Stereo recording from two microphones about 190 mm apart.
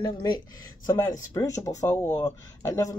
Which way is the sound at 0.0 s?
20° left (ahead or behind).